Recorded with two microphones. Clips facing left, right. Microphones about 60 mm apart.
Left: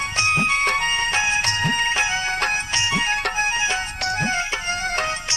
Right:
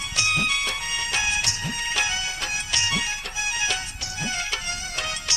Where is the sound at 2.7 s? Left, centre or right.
Left.